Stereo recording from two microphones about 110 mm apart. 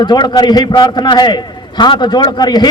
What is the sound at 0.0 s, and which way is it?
A man's voice, 40° left (ahead or behind).